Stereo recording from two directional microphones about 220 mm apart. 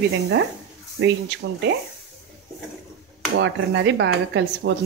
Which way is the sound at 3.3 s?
55° right (ahead or behind).